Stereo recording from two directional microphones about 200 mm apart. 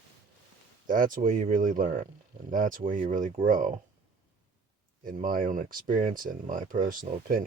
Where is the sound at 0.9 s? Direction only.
45° right (ahead or behind).